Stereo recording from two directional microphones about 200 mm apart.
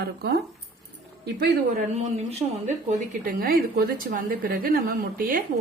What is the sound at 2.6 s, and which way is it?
A woman's voice, 40° right (ahead or behind).